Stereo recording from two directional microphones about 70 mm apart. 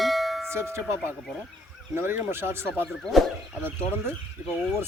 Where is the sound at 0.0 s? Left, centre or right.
Centre.